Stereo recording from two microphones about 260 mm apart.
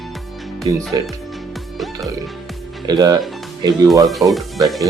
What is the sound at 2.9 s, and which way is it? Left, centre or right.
Speech, centre.